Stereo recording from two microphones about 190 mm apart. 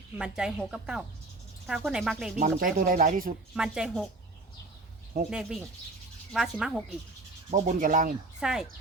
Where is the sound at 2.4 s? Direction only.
45° right (ahead or behind).